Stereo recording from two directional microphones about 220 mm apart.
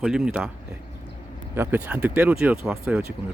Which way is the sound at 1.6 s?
10° right (ahead or behind).